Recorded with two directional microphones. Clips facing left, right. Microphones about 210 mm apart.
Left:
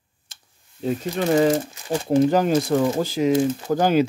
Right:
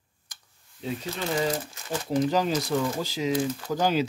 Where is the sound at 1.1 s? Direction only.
55° left (ahead or behind).